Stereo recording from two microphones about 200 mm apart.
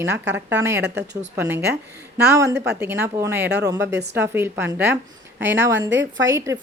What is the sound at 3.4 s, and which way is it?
Speech, 55° right (ahead or behind).